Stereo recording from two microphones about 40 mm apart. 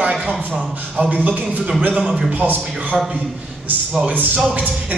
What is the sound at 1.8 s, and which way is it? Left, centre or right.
Speech, right.